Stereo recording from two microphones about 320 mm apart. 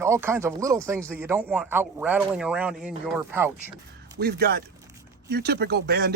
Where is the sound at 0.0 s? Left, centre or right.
Centre.